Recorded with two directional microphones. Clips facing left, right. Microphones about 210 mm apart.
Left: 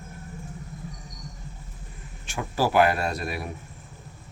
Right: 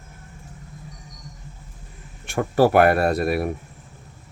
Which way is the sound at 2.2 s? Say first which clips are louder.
Right 8 dB; 55° right (ahead or behind).